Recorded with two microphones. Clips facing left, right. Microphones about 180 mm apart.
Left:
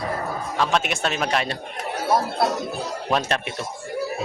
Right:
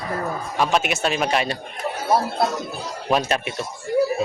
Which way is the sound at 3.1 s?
5° right (ahead or behind).